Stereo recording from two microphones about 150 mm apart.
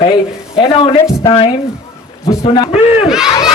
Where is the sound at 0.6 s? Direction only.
35° left (ahead or behind).